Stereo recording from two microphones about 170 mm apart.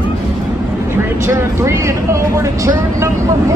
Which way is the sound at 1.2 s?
15° right (ahead or behind).